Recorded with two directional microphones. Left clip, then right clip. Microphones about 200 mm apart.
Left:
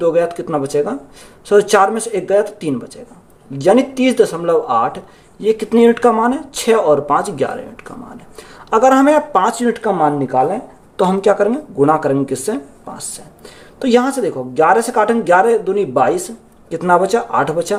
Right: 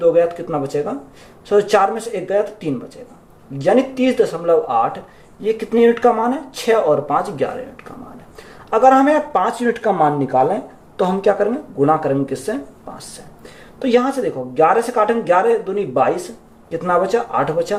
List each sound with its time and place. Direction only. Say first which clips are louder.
0.0 s speech: even; 55° left (ahead or behind)
3.6 s speech: left 3 dB; 55° left (ahead or behind); by 11.0 s 30° left (ahead or behind)
11.0 s speech: left 3 dB; 45° left (ahead or behind)
13.7 s speech: left 2 dB; 50° left (ahead or behind)